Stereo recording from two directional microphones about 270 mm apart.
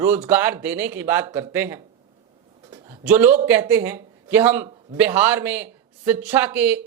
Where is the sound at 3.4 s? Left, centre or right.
Centre.